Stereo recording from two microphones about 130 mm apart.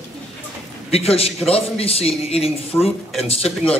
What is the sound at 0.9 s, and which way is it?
Speech, 50° left (ahead or behind).